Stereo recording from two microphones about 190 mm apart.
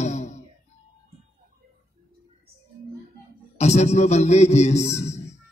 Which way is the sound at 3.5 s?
35° left (ahead or behind).